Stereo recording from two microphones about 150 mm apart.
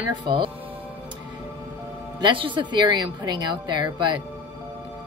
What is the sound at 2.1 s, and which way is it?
Speech, 35° right (ahead or behind).